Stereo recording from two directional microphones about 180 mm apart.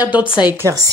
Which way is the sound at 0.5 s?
15° right (ahead or behind).